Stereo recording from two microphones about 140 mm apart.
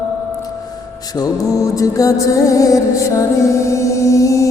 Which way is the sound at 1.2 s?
25° left (ahead or behind).